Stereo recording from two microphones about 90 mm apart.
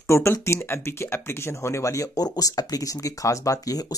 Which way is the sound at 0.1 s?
30° left (ahead or behind).